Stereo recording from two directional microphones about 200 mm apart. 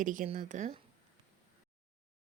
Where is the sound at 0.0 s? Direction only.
40° right (ahead or behind).